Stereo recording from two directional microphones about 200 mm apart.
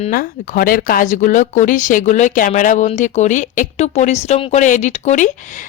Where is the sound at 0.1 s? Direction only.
45° left (ahead or behind).